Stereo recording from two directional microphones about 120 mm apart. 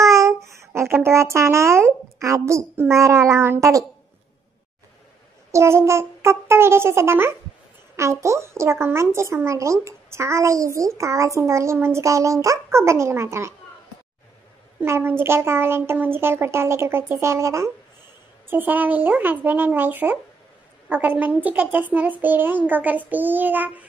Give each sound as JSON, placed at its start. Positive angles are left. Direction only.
{"t": 0.0, "sound": "a child's voice", "side_deg": -25}
{"t": 5.5, "sound": "speech", "side_deg": -20}
{"t": 14.8, "sound": "speech", "side_deg": -20}